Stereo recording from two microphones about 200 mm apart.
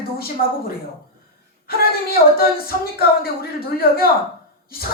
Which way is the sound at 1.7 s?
50° left (ahead or behind).